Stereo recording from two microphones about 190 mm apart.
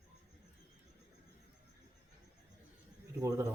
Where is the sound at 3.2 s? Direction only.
15° right (ahead or behind).